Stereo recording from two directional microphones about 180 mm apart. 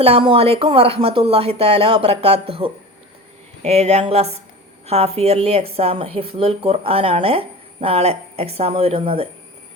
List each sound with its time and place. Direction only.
0.0 s a woman's voice: 30° right (ahead or behind)